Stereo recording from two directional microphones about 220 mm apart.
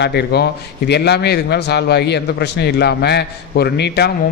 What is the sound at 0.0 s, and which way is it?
A man's voice, 50° left (ahead or behind).